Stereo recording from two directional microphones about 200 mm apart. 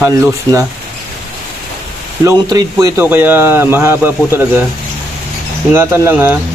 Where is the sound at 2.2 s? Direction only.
20° right (ahead or behind).